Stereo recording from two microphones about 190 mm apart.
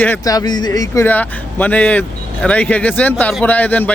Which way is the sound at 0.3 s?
20° left (ahead or behind).